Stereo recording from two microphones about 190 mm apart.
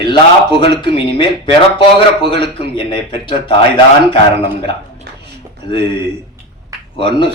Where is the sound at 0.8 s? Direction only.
25° left (ahead or behind).